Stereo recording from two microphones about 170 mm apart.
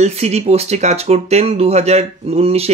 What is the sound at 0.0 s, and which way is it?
Speech, 40° right (ahead or behind).